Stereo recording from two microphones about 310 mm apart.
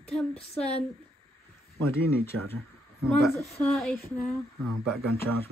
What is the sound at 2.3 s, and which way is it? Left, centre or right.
Speech, right.